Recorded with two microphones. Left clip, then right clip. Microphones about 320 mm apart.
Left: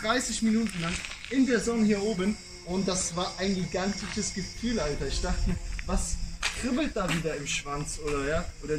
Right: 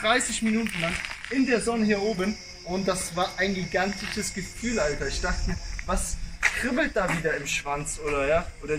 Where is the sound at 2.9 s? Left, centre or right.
Right.